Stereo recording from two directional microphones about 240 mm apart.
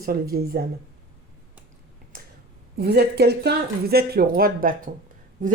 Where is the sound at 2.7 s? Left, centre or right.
Right.